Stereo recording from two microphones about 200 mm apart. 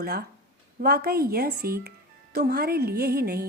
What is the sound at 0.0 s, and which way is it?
A woman's voice, 50° right (ahead or behind).